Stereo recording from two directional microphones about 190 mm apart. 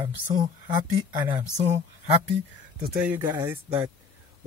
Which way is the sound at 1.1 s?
25° right (ahead or behind).